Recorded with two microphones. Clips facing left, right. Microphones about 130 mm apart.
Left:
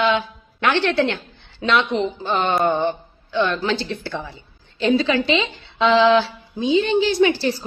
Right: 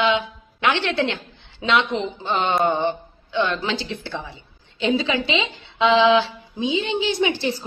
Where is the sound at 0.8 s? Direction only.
50° left (ahead or behind).